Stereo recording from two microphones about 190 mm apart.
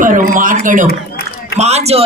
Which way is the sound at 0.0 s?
45° right (ahead or behind).